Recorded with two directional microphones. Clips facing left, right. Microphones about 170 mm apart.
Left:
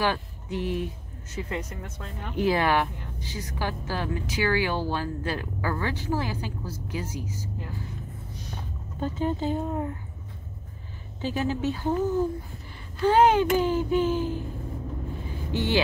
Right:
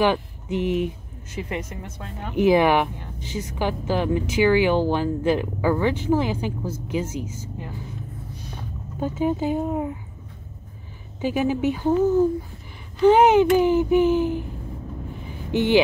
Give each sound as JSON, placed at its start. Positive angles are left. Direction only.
{"t": 0.0, "sound": "speech", "side_deg": -20}
{"t": 9.0, "sound": "speech", "side_deg": -10}
{"t": 11.1, "sound": "speech", "side_deg": -15}
{"t": 13.0, "sound": "speech", "side_deg": -15}
{"t": 15.5, "sound": "speech", "side_deg": -15}